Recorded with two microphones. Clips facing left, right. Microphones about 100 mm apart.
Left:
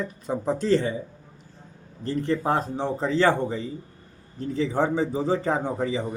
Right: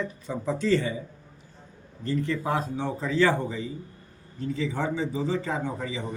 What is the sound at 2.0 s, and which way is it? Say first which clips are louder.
Speech: left 3 dB; 35° left (ahead or behind).